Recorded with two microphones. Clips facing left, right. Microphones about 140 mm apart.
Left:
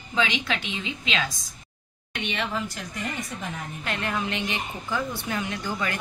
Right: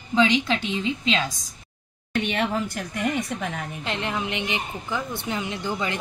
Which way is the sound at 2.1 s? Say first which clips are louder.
Right 5 dB; 45° right (ahead or behind).